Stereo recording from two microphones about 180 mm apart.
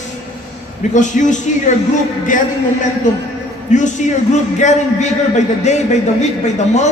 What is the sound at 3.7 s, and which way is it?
Speech, 45° left (ahead or behind).